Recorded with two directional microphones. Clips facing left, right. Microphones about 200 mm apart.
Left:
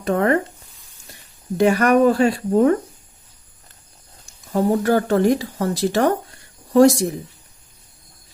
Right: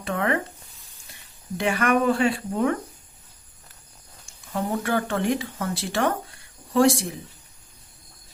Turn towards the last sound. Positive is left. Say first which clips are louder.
# left 6 dB
turn(degrees=40)  # may be behind; listen again after turning